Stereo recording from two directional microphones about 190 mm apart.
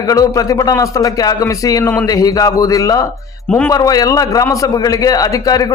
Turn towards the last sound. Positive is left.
turn(degrees=20)  # may be behind; listen again after turning